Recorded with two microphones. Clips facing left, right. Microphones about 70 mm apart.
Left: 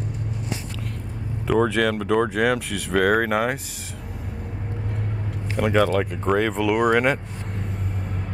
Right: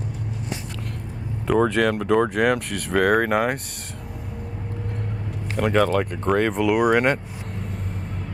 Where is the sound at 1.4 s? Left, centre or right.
Centre.